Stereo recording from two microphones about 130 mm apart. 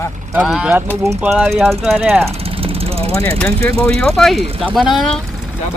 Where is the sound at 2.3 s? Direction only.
50° right (ahead or behind).